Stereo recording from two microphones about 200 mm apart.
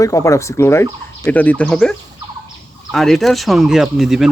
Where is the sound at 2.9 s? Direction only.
Centre (ahead or behind).